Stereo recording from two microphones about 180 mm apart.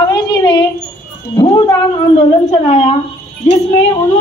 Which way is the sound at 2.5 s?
35° left (ahead or behind).